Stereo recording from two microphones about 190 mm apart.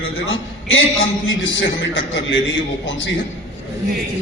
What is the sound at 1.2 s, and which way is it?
A man's voice, 85° left.